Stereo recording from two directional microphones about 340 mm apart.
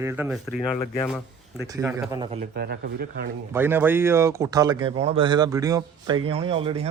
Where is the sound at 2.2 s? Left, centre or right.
Centre.